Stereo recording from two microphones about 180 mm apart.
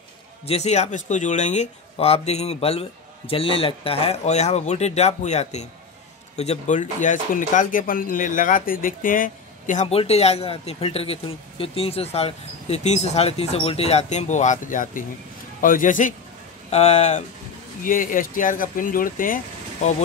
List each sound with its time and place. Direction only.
0.5 s speech: 40° left (ahead or behind)
17.8 s speech: 50° left (ahead or behind)